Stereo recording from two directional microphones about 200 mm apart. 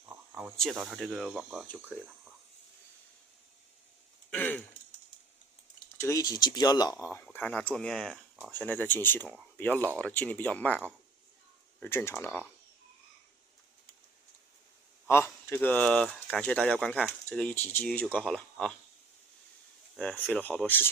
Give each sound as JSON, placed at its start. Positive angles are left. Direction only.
{"t": 0.0, "sound": "a sound", "side_deg": -10}
{"t": 0.5, "sound": "speech", "side_deg": 0}
{"t": 4.3, "sound": "a sound", "side_deg": 10}
{"t": 6.0, "sound": "speech", "side_deg": 15}
{"t": 11.8, "sound": "speech", "side_deg": 10}
{"t": 15.0, "sound": "speech", "side_deg": 15}
{"t": 20.0, "sound": "speech", "side_deg": 5}